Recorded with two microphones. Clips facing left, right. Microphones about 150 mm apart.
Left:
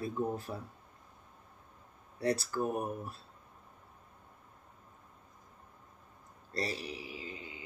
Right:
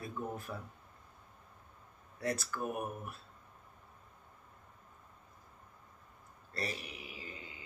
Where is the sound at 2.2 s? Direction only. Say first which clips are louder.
Left 5 dB; 35° left (ahead or behind).